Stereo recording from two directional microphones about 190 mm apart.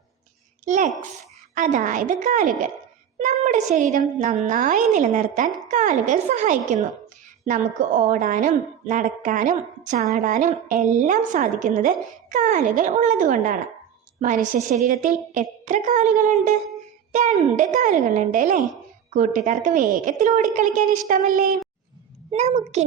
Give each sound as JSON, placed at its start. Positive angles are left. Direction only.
{"t": 0.6, "sound": "a child's voice", "side_deg": -40}